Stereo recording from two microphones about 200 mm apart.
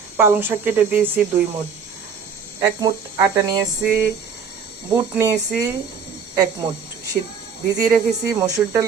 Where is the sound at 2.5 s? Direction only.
20° right (ahead or behind).